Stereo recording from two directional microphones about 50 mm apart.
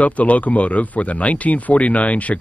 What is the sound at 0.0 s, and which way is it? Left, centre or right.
Speech, left.